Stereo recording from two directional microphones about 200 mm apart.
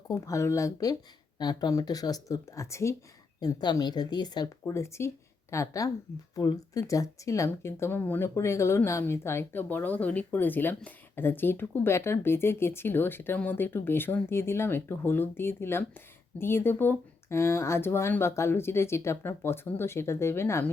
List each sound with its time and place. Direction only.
0.1 s speech: 15° left (ahead or behind)